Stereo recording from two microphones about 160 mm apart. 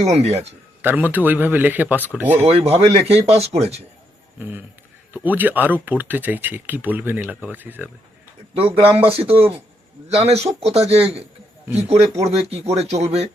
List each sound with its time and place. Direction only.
0.0 s speech: 40° right (ahead or behind)
0.8 s speech: 10° right (ahead or behind)
2.4 s speech: 40° right (ahead or behind)
4.4 s speech: 10° right (ahead or behind)
8.5 s speech: 35° right (ahead or behind)